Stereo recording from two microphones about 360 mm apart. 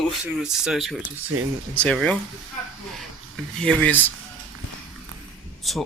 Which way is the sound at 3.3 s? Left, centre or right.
Centre.